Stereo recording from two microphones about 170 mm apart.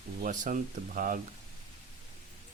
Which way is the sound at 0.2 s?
55° right (ahead or behind).